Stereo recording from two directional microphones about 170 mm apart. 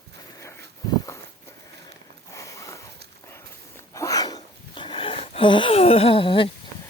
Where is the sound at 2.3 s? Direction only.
20° left (ahead or behind).